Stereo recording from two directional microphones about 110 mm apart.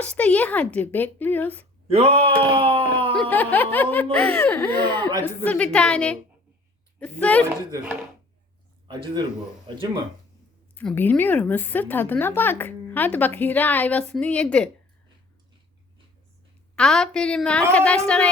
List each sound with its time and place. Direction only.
0.0 s speech: 10° left (ahead or behind)
1.9 s speech: 65° right (ahead or behind)
3.2 s speech: 15° left (ahead or behind)
8.9 s speech: 45° right (ahead or behind)
10.8 s speech: 15° left (ahead or behind)
16.7 s speech: 5° left (ahead or behind)